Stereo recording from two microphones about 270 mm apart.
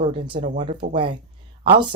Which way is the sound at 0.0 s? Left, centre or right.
Centre.